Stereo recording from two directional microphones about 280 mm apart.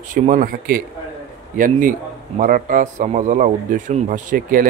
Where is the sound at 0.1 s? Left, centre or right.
Right.